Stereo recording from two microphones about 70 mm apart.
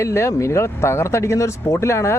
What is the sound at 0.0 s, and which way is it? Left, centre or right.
Speech, left.